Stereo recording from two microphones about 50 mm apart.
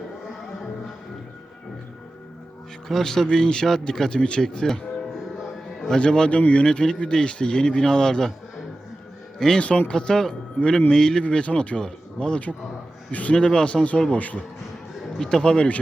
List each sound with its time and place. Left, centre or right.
2.9 s speech: centre
5.8 s speech: centre
9.6 s speech: left
13.1 s a man's voice: left
13.3 s speech: centre
14.1 s speech: left
15.2 s speech: centre